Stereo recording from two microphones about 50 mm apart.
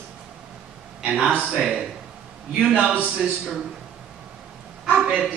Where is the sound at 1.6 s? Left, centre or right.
Centre.